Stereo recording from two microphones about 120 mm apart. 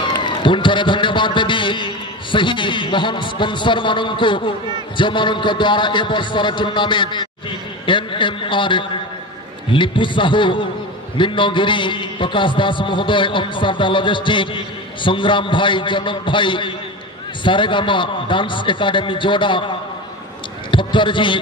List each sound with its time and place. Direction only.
0.2 s a man's voice: 40° left (ahead or behind)
20.7 s a man's voice: 45° left (ahead or behind)